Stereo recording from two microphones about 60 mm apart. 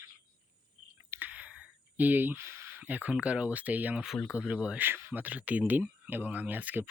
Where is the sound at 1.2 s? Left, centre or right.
Right.